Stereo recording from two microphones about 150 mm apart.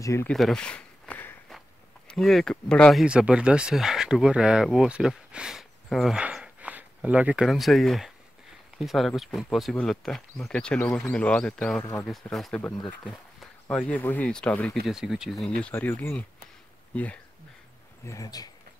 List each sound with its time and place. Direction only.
0.0 s speech: 20° left (ahead or behind)
0.3 s a sound: 5° left (ahead or behind)
2.0 s speech: 5° left (ahead or behind)
12.8 s a sound: 5° left (ahead or behind)
13.7 s speech: 10° left (ahead or behind)
14.9 s speech: 5° right (ahead or behind)
15.7 s speech: 15° left (ahead or behind)
18.0 s speech: 25° left (ahead or behind)